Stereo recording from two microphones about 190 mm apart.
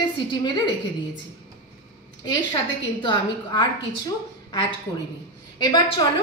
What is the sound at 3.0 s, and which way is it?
Speech, 25° left (ahead or behind).